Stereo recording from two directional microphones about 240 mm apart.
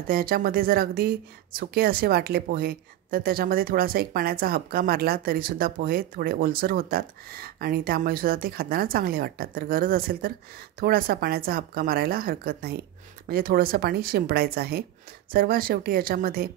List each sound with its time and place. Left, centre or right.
0.1 s speech: right